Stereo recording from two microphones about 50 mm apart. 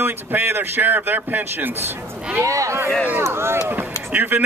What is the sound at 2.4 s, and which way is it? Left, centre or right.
Speech, right.